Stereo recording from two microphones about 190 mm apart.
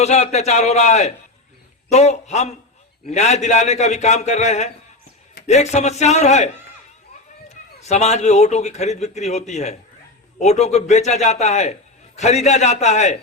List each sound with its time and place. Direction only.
0.0 s a man's voice: 35° left (ahead or behind)